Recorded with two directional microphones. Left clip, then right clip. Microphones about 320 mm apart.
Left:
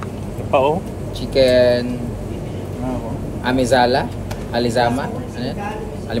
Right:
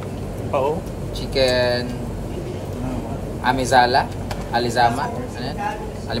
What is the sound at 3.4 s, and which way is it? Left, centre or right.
A man's voice, centre.